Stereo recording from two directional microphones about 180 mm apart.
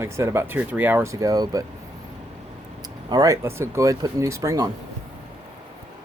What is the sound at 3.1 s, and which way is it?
Speech, 20° right (ahead or behind).